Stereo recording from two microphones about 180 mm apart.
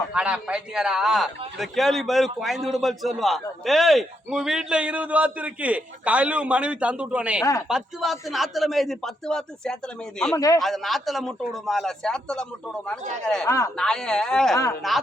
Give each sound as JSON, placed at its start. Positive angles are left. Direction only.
{"t": 0.1, "sound": "a man's voice", "side_deg": -5}
{"t": 10.3, "sound": "speech", "side_deg": 20}
{"t": 10.6, "sound": "a man's voice", "side_deg": 0}
{"t": 14.5, "sound": "speech", "side_deg": 20}